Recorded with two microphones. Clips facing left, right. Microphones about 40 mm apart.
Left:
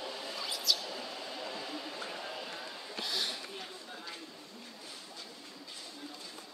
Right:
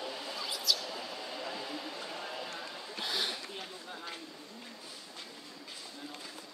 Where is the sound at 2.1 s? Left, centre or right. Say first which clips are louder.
Right 1 dB; centre.